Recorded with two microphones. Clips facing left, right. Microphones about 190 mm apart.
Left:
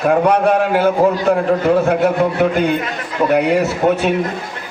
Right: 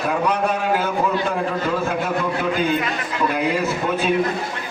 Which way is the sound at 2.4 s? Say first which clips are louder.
Left 5 dB; 70° left (ahead or behind).